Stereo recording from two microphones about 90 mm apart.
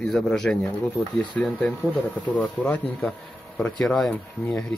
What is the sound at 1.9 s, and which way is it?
Speech, 15° left (ahead or behind).